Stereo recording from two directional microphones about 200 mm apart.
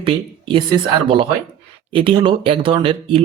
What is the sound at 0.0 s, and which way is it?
Speech, 25° right (ahead or behind).